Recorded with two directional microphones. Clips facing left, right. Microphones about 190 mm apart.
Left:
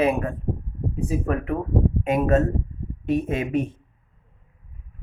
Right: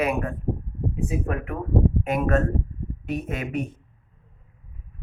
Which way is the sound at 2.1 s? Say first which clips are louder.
Left 5 dB; 25° left (ahead or behind).